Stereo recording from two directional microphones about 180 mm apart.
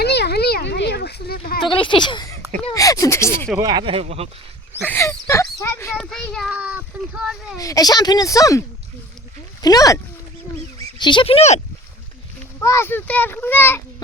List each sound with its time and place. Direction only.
0.0 s a sound: 65° left (ahead or behind)
1.6 s speech: 25° left (ahead or behind)
2.7 s a sound: 20° left (ahead or behind)
3.6 s speech: 25° right (ahead or behind)
4.8 s a sound: 10° left (ahead or behind)
6.0 s a child's voice: 5° left (ahead or behind)
6.5 s speech: 10° right (ahead or behind)
7.6 s speech: 20° left (ahead or behind); by 11.6 s 35° left (ahead or behind)
12.5 s a child's voice: 15° left (ahead or behind)